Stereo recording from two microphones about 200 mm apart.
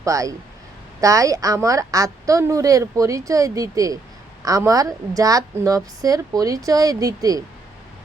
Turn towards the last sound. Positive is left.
turn(degrees=-15)  # may be behind; listen again after turning